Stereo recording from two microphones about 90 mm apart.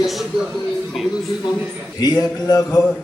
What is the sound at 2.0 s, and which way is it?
Speech, 45° left (ahead or behind).